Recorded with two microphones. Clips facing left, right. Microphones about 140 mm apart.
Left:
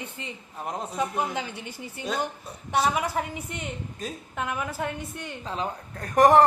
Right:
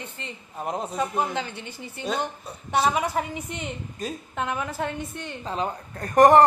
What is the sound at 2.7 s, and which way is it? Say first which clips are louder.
Speech: right 2 dB; 25° right (ahead or behind).